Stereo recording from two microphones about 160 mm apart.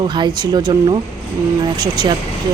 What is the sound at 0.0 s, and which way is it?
Speech, 30° right (ahead or behind).